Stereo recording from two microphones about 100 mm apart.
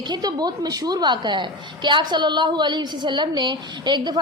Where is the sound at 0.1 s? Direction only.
40° right (ahead or behind).